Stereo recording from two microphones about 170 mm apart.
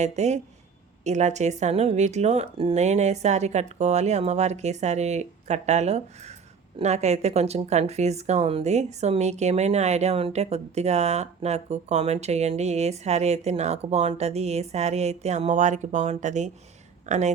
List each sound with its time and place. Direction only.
0.0 s speech: 40° right (ahead or behind)